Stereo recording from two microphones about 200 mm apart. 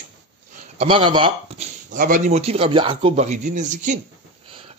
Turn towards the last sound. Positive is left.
turn(degrees=-40)  # may be behind; listen again after turning